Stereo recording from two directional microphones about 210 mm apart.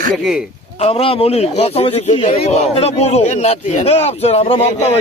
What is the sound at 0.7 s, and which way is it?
A man's voice, 30° left (ahead or behind).